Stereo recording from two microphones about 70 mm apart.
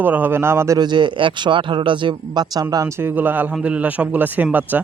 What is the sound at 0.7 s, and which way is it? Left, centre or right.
Speech, right.